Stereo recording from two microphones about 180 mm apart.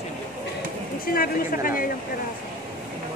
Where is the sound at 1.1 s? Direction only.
50° left (ahead or behind).